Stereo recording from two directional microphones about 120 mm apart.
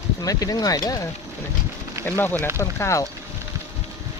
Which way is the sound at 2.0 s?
15° left (ahead or behind).